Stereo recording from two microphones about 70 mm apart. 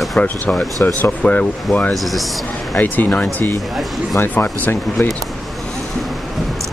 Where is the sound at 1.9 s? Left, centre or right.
Centre.